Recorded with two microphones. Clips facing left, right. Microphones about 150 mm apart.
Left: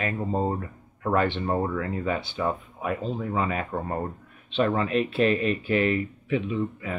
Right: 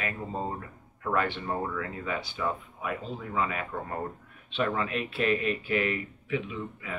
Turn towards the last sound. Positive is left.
turn(degrees=35)  # may be behind; listen again after turning